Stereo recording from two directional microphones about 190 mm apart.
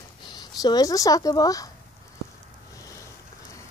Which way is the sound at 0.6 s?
20° left (ahead or behind).